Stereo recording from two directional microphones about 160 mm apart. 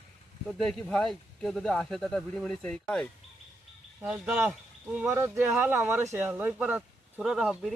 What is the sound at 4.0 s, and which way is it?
Speech, 5° right (ahead or behind).